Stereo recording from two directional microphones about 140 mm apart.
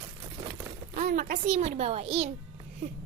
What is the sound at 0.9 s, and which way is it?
A child's voice, 60° right (ahead or behind).